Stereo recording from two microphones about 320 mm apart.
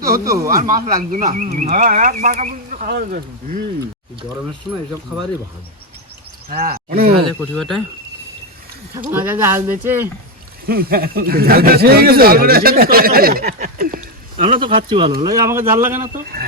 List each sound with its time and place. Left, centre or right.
0.3 s speech: centre
0.5 s speech: right
6.5 s speech: right
7.3 s speech: centre
9.0 s speech: centre
10.7 s speech: right; by 16.0 s centre
16.1 s speech: right